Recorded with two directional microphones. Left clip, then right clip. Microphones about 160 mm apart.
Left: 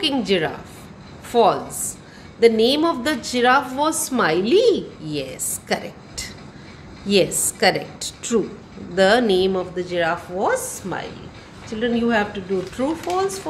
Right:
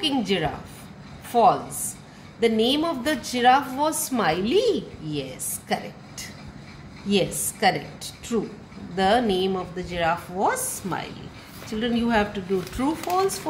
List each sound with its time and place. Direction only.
0.0 s a woman's voice: 20° left (ahead or behind); by 13.4 s centre (ahead or behind)